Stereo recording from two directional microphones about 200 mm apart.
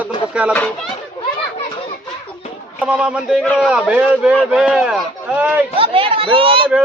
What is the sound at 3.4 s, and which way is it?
Speech, 10° left (ahead or behind).